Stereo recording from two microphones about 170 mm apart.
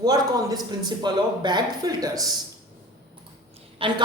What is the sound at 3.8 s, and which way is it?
Speech, 25° right (ahead or behind).